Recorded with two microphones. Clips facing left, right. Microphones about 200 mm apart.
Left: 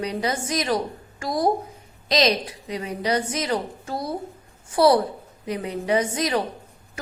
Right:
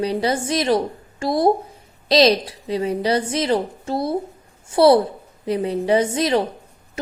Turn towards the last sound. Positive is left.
turn(degrees=-30)  # may be behind; listen again after turning